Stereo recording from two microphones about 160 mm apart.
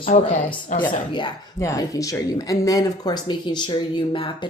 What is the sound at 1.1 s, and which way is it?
Speech, 30° left (ahead or behind).